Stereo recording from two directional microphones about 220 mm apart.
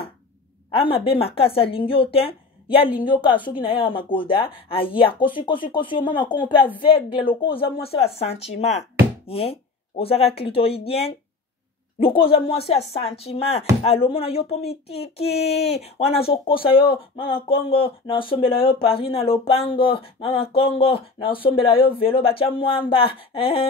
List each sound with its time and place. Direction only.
0.7 s a woman's voice: 25° left (ahead or behind)